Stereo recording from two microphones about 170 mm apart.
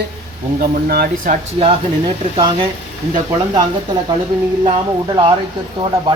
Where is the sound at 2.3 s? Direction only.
25° right (ahead or behind).